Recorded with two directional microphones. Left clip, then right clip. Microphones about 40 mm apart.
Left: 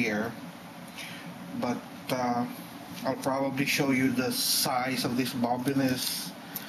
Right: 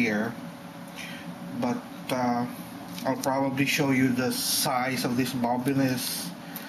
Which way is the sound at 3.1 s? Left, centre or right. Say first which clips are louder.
Right 2 dB; right.